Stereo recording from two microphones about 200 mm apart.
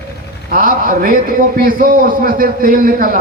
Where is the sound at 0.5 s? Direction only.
45° right (ahead or behind).